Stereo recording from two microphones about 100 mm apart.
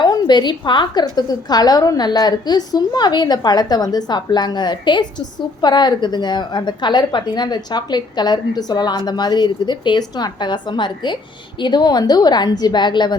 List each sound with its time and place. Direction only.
0.0 s a woman's voice: 50° left (ahead or behind)